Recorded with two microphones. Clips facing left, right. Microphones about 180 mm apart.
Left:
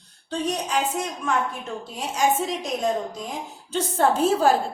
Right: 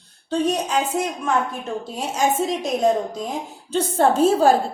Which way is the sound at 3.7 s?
35° right (ahead or behind).